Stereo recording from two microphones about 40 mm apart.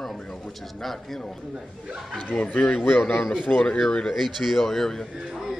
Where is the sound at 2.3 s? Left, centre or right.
Left.